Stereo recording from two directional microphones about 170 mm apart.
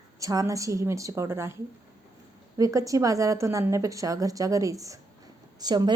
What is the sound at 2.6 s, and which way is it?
A woman's voice, 20° right (ahead or behind).